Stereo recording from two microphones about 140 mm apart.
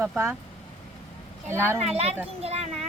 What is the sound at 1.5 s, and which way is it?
Speech, 15° right (ahead or behind).